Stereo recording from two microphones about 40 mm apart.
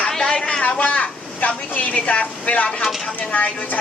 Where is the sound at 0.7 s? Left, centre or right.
Left.